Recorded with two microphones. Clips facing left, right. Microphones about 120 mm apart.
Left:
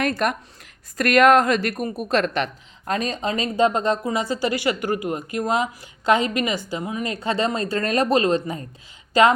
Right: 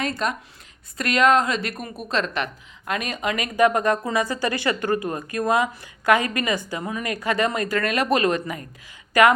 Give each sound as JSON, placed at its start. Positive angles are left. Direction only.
{"t": 0.2, "sound": "a woman's voice", "side_deg": 60}